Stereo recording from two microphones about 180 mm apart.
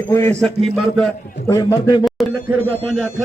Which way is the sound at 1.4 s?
20° left (ahead or behind).